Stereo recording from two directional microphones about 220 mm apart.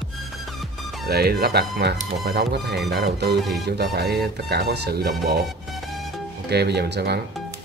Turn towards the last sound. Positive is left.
turn(degrees=-50)  # may be behind; listen again after turning